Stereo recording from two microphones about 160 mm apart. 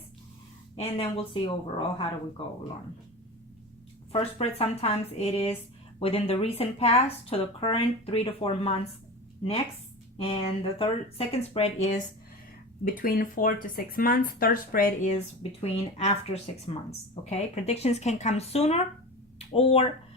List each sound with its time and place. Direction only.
0.8 s speech: 35° left (ahead or behind)
4.1 s speech: 40° left (ahead or behind)
12.8 s speech: 60° left (ahead or behind)
15.6 s speech: 40° left (ahead or behind)